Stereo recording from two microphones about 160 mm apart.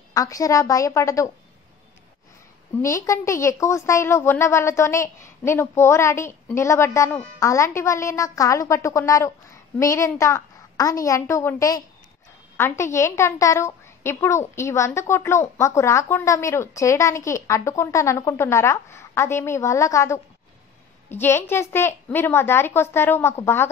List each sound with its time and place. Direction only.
0.1 s a woman's voice: 20° left (ahead or behind)
2.8 s a woman's voice: 20° left (ahead or behind)